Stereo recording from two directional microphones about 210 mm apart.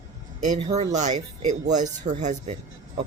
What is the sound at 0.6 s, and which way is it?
Speech, 20° right (ahead or behind).